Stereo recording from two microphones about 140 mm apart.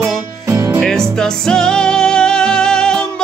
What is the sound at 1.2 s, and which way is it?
Music, 5° left (ahead or behind).